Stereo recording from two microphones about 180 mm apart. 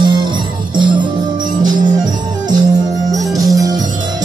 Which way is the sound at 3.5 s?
20° right (ahead or behind).